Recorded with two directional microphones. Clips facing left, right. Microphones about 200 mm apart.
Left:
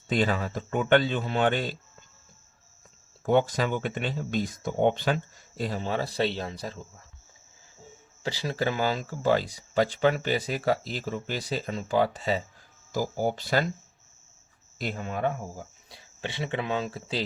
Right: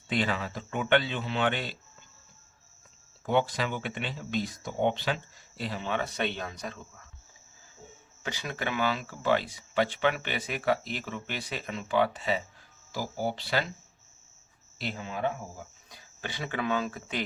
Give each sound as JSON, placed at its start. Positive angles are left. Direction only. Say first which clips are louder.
{"t": 0.1, "sound": "speech", "louder": "left 4 dB", "side_deg": 45}
{"t": 3.2, "sound": "speech", "louder": "left 4 dB", "side_deg": 45}
{"t": 8.2, "sound": "speech", "louder": "left 6 dB", "side_deg": 30}
{"t": 14.8, "sound": "speech", "louder": "left 3 dB", "side_deg": 45}
{"t": 15.9, "sound": "speech", "louder": "left 4 dB", "side_deg": 25}